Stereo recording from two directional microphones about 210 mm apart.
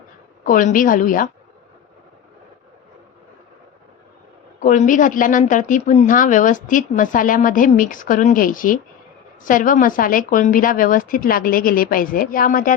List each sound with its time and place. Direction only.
0.4 s a woman's voice: 40° left (ahead or behind)
4.6 s a woman's voice: 40° left (ahead or behind)